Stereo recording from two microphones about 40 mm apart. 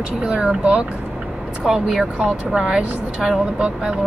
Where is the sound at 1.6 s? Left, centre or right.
Centre.